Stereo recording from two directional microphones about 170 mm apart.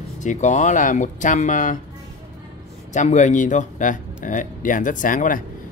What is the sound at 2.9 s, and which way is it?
Speech, 45° left (ahead or behind).